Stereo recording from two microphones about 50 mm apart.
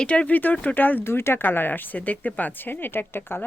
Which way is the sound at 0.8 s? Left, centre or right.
Left.